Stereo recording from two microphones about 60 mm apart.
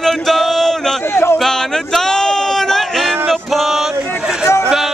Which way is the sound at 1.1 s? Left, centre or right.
Left.